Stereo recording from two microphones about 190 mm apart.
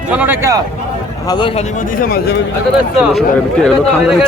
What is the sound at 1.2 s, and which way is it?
Speech, 25° left (ahead or behind).